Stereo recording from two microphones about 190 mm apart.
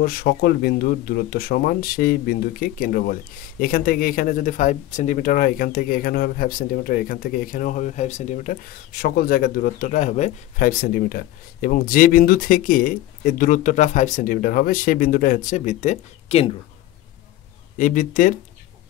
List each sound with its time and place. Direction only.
0.0 s speech: 50° left (ahead or behind); by 16.5 s 30° left (ahead or behind)
17.7 s speech: 45° left (ahead or behind)